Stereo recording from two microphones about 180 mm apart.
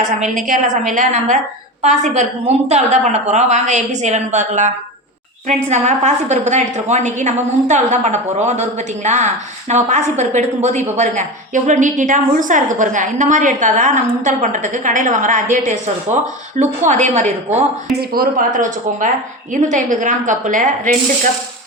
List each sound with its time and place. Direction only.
0.2 s a woman's voice: 45° right (ahead or behind)
18.1 s a woman's voice: 50° right (ahead or behind)